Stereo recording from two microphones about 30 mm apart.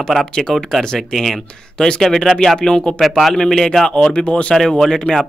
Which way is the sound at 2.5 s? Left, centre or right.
Left.